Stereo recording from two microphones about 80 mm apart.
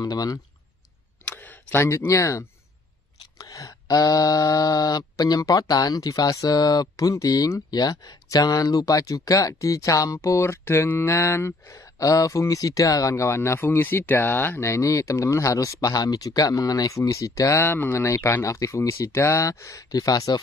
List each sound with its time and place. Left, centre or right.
0.0 s mantra: left
1.2 s a sound: centre
2.0 s speech: left
3.3 s mantra: left
17.6 s speech: left
17.9 s speech: left
19.9 s mantra: left